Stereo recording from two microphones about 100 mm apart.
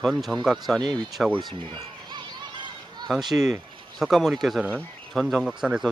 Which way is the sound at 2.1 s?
50° right (ahead or behind).